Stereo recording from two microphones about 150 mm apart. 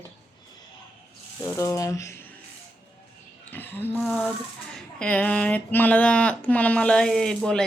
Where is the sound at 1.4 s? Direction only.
20° left (ahead or behind).